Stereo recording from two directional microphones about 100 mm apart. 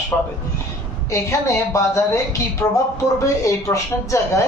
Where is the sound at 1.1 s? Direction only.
30° left (ahead or behind).